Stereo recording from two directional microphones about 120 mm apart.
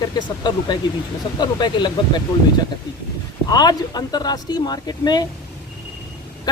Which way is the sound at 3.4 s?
35° left (ahead or behind).